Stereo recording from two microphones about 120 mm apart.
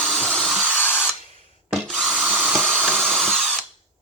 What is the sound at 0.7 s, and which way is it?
Spray, 15° left (ahead or behind).